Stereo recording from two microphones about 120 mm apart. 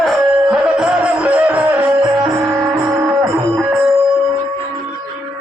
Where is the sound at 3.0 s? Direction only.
5° right (ahead or behind).